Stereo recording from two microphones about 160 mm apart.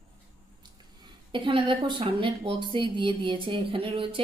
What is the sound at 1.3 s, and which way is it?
A woman's voice, 30° right (ahead or behind).